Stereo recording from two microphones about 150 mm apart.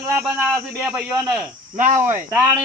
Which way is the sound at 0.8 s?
5° right (ahead or behind).